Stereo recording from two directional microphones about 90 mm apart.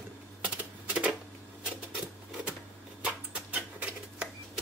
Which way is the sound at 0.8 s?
15° right (ahead or behind).